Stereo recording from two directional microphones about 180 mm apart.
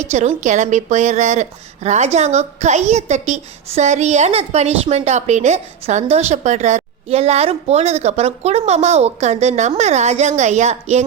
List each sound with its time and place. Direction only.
0.0 s a woman's voice: 40° right (ahead or behind)